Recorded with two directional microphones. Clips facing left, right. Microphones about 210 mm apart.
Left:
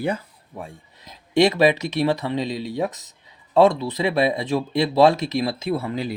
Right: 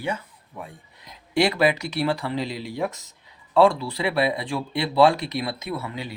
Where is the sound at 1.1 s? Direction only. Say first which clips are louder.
Left 4 dB; 25° left (ahead or behind).